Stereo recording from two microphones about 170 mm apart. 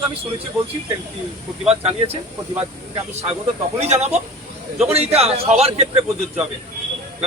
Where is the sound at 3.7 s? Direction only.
40° right (ahead or behind).